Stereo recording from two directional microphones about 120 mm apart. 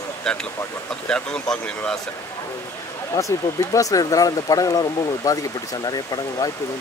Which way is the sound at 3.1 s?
25° left (ahead or behind).